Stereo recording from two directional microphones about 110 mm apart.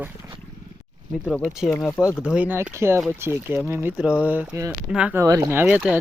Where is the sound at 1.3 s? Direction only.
Centre (ahead or behind).